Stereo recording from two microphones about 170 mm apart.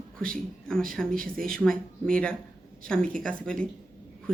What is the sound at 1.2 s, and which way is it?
Speech, 55° right (ahead or behind).